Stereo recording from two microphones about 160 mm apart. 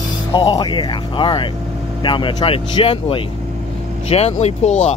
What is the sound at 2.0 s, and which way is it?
Speech, 30° left (ahead or behind).